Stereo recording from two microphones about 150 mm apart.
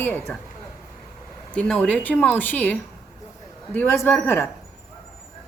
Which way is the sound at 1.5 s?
5° left (ahead or behind).